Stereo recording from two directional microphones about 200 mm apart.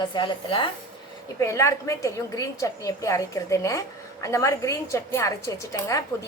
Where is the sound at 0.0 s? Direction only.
25° left (ahead or behind).